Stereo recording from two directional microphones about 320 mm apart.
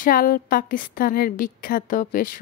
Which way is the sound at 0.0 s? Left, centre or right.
Left.